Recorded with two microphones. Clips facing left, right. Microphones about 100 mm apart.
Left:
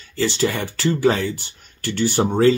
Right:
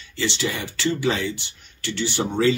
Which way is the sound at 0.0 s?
40° left (ahead or behind).